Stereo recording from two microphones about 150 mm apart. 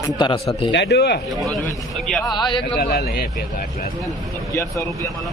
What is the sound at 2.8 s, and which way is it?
Speech, 90° left.